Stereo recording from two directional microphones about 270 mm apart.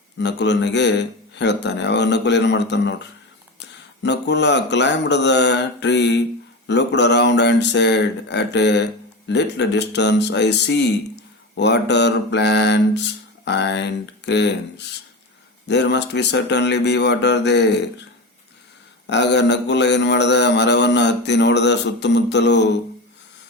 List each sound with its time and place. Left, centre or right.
0.2 s mantra: left
19.0 s mantra: left